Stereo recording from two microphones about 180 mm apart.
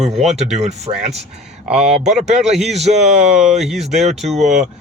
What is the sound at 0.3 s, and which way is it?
Speech, 40° right (ahead or behind).